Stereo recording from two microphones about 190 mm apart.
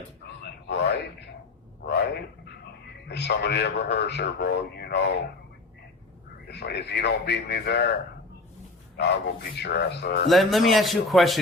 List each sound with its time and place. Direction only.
0.4 s a sound: 60° left (ahead or behind)
3.1 s a man's voice: 60° left (ahead or behind)
6.5 s a man's voice: 60° left (ahead or behind)
9.0 s a man's voice: 65° left (ahead or behind)
10.2 s a man's voice: centre (ahead or behind)